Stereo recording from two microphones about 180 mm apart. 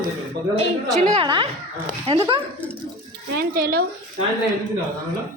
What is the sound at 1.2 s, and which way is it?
Speech, 30° right (ahead or behind).